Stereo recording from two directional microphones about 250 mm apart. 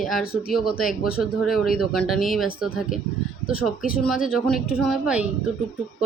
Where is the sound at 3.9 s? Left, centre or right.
Centre.